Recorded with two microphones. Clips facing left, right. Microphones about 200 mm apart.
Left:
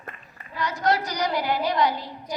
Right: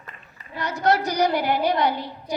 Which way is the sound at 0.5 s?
65° right (ahead or behind).